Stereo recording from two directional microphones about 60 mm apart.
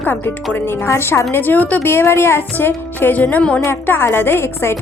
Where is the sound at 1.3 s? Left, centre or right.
Left.